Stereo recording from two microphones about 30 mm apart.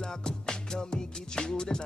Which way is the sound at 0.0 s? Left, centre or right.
Left.